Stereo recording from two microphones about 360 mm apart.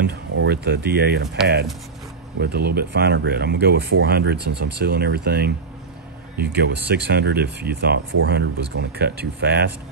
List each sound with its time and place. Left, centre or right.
0.0 s speech: right